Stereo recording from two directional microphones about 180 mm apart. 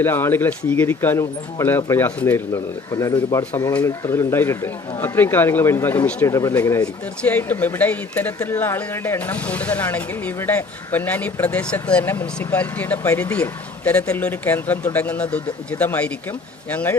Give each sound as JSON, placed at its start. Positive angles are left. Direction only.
{"t": 0.0, "sound": "speech", "side_deg": 10}